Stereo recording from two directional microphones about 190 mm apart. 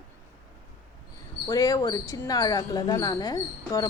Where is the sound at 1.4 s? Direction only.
20° left (ahead or behind).